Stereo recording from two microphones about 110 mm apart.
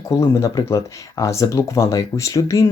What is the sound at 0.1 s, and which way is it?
Speech, 25° left (ahead or behind).